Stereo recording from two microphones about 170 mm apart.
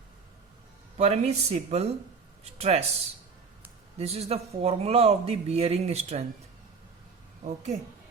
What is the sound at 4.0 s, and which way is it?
Speech, 40° right (ahead or behind).